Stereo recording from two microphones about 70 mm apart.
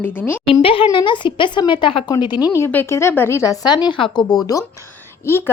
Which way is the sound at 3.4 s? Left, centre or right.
Left.